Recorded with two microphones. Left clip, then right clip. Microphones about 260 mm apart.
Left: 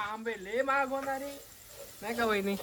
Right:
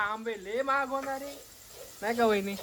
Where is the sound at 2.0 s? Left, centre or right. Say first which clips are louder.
Right 5 dB; right.